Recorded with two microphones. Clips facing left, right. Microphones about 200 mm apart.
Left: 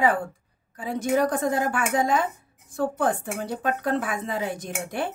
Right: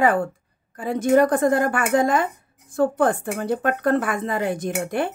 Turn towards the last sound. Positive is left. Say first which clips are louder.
# right 6 dB
turn(degrees=-55)  # may be behind; listen again after turning